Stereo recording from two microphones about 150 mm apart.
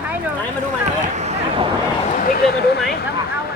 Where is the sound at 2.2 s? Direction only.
80° left.